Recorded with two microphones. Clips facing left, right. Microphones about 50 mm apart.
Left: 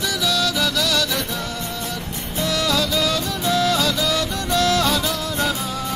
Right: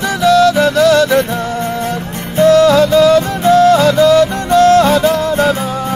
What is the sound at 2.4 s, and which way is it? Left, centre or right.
Music, right.